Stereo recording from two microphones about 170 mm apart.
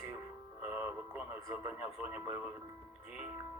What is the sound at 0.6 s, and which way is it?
Speech, 10° right (ahead or behind).